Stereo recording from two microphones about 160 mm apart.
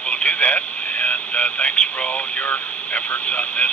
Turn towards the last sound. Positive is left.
turn(degrees=10)  # may be behind; listen again after turning